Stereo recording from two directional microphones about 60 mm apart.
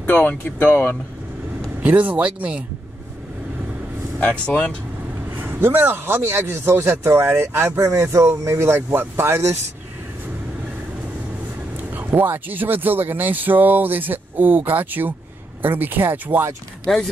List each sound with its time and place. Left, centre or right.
0.0 s speech: left
2.0 s speech: right
4.2 s speech: left
5.3 s speech: right
11.9 s speech: right